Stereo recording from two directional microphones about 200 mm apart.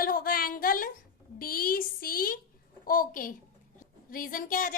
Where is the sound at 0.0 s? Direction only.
45° left (ahead or behind).